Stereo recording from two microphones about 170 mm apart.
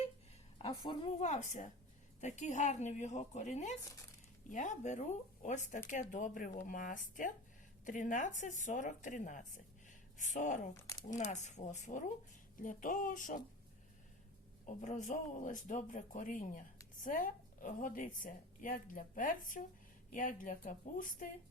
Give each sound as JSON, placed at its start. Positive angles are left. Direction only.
{"t": 0.8, "sound": "a woman's voice", "side_deg": 25}
{"t": 1.2, "sound": "speech", "side_deg": 45}
{"t": 14.7, "sound": "speech", "side_deg": 45}